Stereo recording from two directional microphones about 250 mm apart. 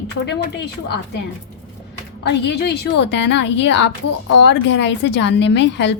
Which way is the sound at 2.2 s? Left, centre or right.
Left.